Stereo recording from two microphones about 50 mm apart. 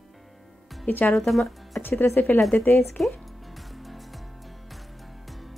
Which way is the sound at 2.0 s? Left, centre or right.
Left.